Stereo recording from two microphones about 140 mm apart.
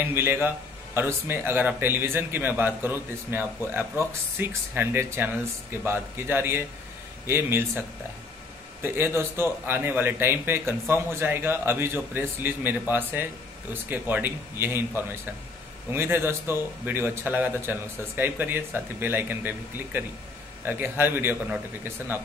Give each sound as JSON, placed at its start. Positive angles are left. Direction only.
{"t": 0.1, "sound": "a man's voice", "side_deg": -15}
{"t": 8.8, "sound": "a man's voice", "side_deg": -15}